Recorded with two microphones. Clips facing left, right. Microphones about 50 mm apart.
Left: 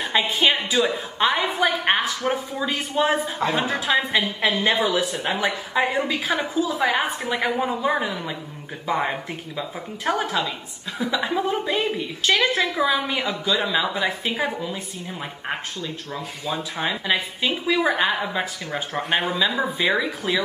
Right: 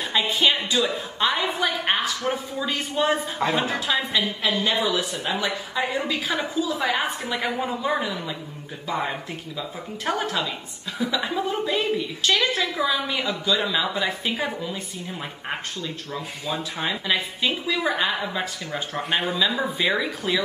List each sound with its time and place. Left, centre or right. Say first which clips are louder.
0.2 s a woman's voice: right 2 dB; centre
0.5 s speech: left 2 dB; centre
1.3 s a woman's voice: left 3 dB; centre
1.9 s a woman's voice: left 2 dB; centre
2.3 s a woman's voice: left 2 dB; centre
4.1 s speech: left 2 dB; left
4.9 s a woman's voice: left 3 dB; centre
5.2 s speech: left 2 dB; left
6.2 s a woman's voice: left 2 dB; centre
8.8 s speech: left 3 dB; left
10.0 s a woman's voice: left 2 dB; centre